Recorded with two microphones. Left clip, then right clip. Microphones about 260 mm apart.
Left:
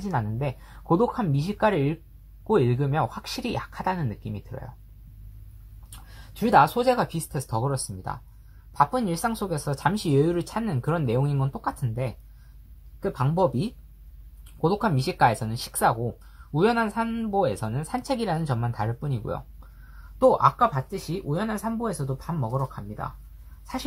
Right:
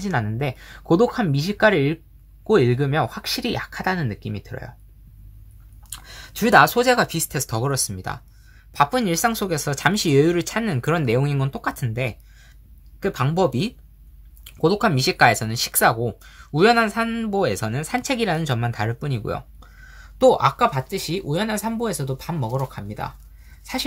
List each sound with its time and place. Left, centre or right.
0.0 s speech: right
5.9 s speech: right